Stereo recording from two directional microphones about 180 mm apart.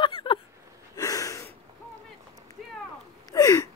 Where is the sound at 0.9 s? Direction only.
20° left (ahead or behind).